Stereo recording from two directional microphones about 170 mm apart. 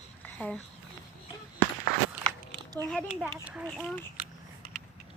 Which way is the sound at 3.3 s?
5° right (ahead or behind).